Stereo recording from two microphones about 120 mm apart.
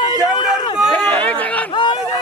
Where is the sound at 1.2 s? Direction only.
15° left (ahead or behind).